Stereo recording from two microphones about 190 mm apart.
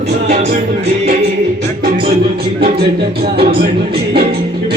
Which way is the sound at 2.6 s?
55° right (ahead or behind).